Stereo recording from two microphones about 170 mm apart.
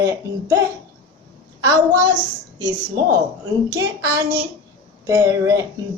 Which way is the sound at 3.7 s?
20° right (ahead or behind).